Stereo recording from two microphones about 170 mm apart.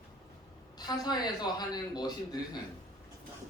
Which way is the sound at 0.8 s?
25° left (ahead or behind).